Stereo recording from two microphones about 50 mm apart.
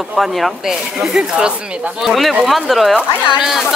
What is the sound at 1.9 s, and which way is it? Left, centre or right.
Speech, centre.